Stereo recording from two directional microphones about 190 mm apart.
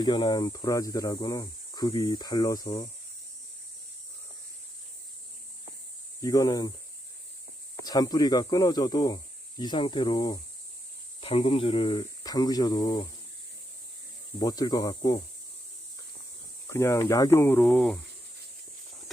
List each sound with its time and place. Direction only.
0.0 s speech: 25° left (ahead or behind)
6.2 s speech: 20° left (ahead or behind)
7.9 s speech: 20° left (ahead or behind)
14.3 s speech: 20° left (ahead or behind)
16.6 s speech: 15° left (ahead or behind)